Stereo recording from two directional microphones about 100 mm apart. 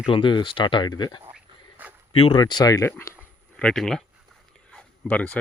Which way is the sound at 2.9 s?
25° left (ahead or behind).